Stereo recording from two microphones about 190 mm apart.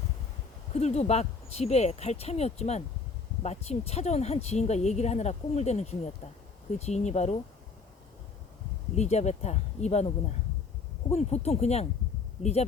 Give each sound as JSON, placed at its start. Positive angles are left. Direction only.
{"t": 0.7, "sound": "speech", "side_deg": 35}
{"t": 9.0, "sound": "speech", "side_deg": 35}